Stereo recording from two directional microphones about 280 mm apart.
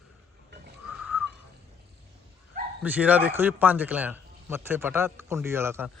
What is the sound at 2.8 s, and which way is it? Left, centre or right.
A man's voice, centre.